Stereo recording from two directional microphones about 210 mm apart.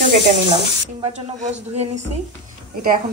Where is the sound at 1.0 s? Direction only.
30° right (ahead or behind).